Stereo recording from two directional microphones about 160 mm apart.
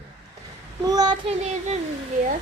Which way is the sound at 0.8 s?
25° right (ahead or behind).